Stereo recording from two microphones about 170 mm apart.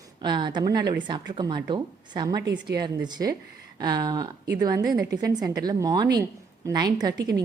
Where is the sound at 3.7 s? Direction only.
25° right (ahead or behind).